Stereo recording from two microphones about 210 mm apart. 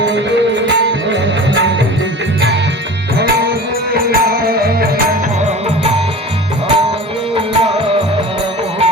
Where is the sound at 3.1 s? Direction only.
45° right (ahead or behind).